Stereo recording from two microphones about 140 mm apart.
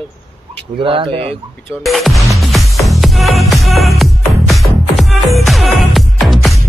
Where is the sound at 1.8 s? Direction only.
Centre (ahead or behind).